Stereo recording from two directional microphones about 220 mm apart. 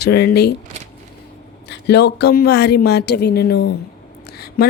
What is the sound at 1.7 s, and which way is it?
Speech, 50° left (ahead or behind).